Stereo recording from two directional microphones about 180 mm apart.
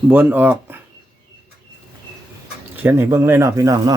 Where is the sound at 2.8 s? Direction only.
10° right (ahead or behind).